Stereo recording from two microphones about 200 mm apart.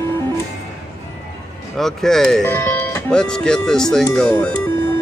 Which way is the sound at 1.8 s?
Centre (ahead or behind).